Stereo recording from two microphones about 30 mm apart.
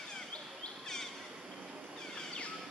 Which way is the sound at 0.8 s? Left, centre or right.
Centre.